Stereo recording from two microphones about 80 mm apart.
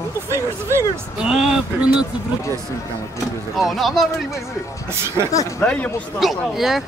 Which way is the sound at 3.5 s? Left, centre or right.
Centre.